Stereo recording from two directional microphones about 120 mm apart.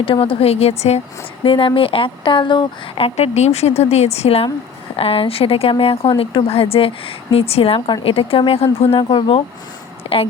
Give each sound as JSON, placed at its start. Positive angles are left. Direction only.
{"t": 0.0, "sound": "a woman's voice", "side_deg": 50}
{"t": 1.5, "sound": "a woman's voice", "side_deg": 45}
{"t": 3.2, "sound": "a woman's voice", "side_deg": 65}
{"t": 10.0, "sound": "a sound", "side_deg": 55}